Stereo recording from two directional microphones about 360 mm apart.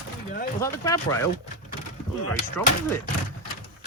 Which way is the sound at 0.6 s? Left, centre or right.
Centre.